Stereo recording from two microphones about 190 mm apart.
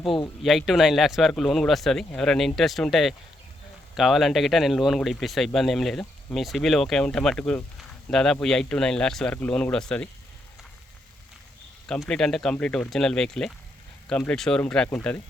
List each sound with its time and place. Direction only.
0.4 s speech: centre (ahead or behind)
11.9 s speech: 5° left (ahead or behind)